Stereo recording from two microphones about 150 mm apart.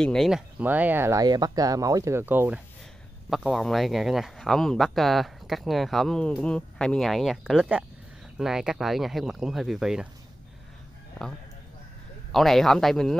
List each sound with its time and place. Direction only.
0.0 s speech: centre (ahead or behind)
0.6 s speech: 10° right (ahead or behind)
3.3 s speech: centre (ahead or behind)
12.3 s speech: centre (ahead or behind)